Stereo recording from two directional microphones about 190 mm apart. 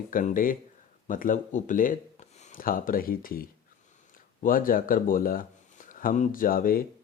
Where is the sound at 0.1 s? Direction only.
45° left (ahead or behind).